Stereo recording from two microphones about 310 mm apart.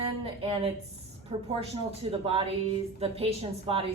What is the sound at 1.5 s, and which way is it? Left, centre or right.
A woman's voice, centre.